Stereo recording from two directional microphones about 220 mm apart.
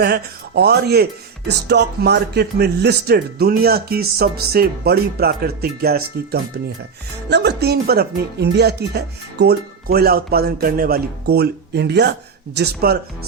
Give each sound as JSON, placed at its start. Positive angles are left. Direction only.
{"t": 0.0, "sound": "speech", "side_deg": -45}